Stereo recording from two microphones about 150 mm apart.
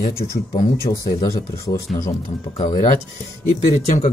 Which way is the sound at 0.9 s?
40° left (ahead or behind).